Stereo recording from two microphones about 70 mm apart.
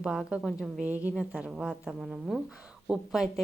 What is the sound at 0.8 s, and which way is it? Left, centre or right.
Speech, right.